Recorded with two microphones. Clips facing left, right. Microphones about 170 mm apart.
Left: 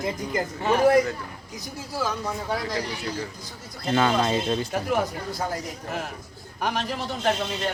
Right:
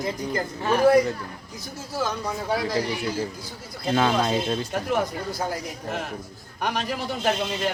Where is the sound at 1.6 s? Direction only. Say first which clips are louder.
Right 1 dB; 10° left (ahead or behind).